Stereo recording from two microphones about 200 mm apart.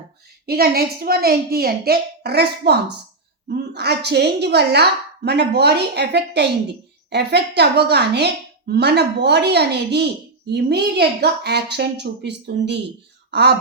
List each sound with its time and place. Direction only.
0.4 s a woman's voice: 50° right (ahead or behind)